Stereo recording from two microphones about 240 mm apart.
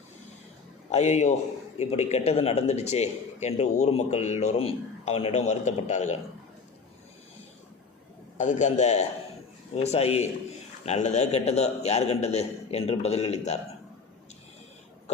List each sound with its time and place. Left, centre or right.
0.9 s a man's voice: left
8.4 s a man's voice: left